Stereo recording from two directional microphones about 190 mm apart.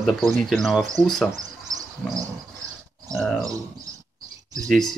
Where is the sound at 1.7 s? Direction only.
40° right (ahead or behind).